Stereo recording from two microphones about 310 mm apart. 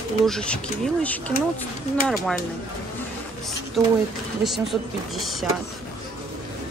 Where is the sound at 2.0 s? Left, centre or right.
Centre.